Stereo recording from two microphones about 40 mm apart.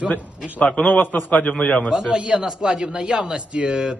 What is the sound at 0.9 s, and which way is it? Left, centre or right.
Speech, left.